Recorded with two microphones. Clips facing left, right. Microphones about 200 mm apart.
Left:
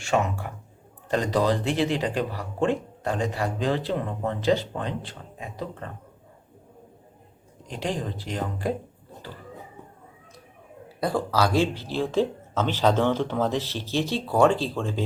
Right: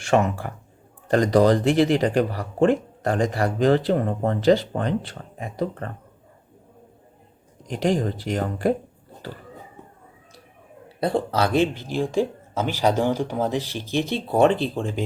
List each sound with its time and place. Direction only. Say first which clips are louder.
0.1 s speech: right 5 dB; 50° right (ahead or behind)
1.3 s speech: right 7 dB; 45° right (ahead or behind)
3.0 s speech: right 5 dB; 65° right (ahead or behind)
7.7 s speech: right 7 dB; 50° right (ahead or behind)
8.2 s speech: right 6 dB; 65° right (ahead or behind)
10.8 s speech: right 3 dB; 25° right (ahead or behind)